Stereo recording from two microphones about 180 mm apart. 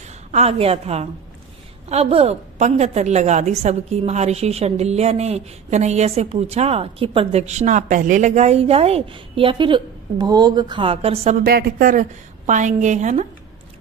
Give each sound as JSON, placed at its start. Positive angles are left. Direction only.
{"t": 0.0, "sound": "a woman's voice", "side_deg": -40}
{"t": 11.4, "sound": "a woman's voice", "side_deg": -55}